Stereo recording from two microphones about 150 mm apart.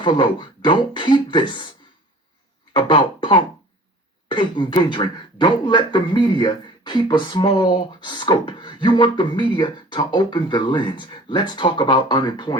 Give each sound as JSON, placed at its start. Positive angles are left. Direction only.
{"t": 0.0, "sound": "speech", "side_deg": 30}
{"t": 2.7, "sound": "speech", "side_deg": 30}